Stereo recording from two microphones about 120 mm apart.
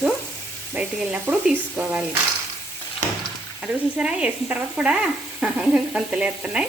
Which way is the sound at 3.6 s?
10° right (ahead or behind).